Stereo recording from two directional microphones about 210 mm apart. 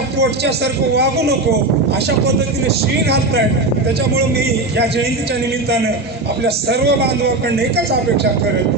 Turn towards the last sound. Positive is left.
turn(degrees=-50)  # may be behind; listen again after turning